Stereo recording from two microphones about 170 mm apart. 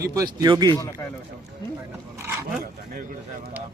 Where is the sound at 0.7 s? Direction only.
20° left (ahead or behind).